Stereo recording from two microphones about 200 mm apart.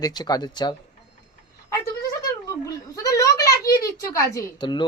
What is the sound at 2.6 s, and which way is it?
Speech, 15° left (ahead or behind).